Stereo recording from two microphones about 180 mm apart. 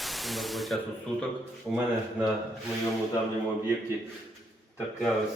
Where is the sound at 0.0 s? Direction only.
Centre (ahead or behind).